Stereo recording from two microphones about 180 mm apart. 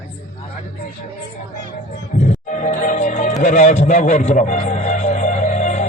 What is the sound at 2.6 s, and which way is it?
Music, 45° left (ahead or behind).